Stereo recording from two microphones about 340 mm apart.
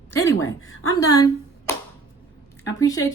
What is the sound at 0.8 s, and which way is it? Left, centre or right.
Speech, centre.